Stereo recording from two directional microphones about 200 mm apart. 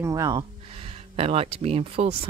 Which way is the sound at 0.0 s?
20° right (ahead or behind).